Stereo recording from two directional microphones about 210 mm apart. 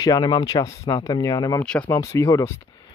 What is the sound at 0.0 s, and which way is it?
Speech, 20° left (ahead or behind).